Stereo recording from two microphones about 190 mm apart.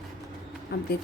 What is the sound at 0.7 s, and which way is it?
Speech, 60° left (ahead or behind).